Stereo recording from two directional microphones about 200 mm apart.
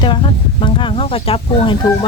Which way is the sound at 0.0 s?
25° left (ahead or behind).